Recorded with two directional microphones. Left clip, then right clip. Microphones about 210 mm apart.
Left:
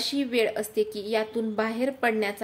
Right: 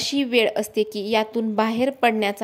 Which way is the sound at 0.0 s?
35° right (ahead or behind).